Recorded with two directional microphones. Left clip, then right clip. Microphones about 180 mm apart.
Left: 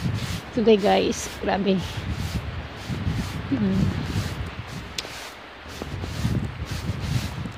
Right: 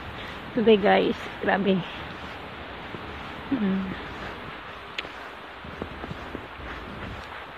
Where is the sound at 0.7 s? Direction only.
15° left (ahead or behind).